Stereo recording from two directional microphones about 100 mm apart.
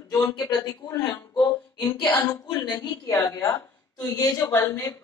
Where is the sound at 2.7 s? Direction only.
35° left (ahead or behind).